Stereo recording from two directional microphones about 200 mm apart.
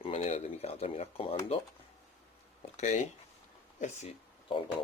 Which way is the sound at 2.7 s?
35° left (ahead or behind).